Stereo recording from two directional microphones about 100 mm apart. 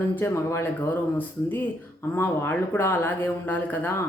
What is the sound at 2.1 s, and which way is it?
Speech, 25° left (ahead or behind).